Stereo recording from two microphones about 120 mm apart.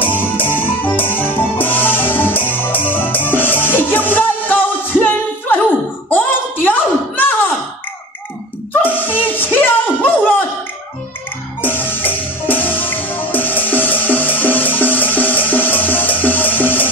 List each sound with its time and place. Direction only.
0.0 s music: 15° left (ahead or behind)
6.0 s a sound: 15° left (ahead or behind)
8.8 s music: 15° left (ahead or behind)
11.6 s music: 15° left (ahead or behind)